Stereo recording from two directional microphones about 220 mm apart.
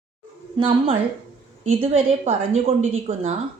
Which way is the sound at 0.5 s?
20° right (ahead or behind).